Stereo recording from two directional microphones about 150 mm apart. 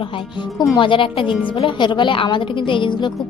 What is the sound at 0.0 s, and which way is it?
A woman's voice, 35° left (ahead or behind).